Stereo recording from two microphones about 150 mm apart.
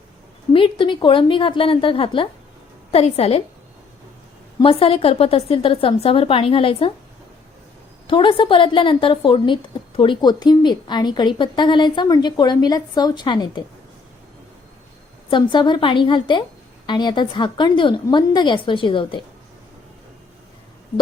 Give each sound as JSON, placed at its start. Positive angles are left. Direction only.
{"t": 0.5, "sound": "a woman's voice", "side_deg": 35}
{"t": 4.6, "sound": "a woman's voice", "side_deg": 35}
{"t": 8.0, "sound": "a woman's voice", "side_deg": 35}
{"t": 15.3, "sound": "a woman's voice", "side_deg": 30}